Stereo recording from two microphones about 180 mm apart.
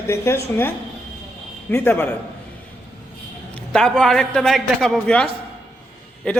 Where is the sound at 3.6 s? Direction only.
5° left (ahead or behind).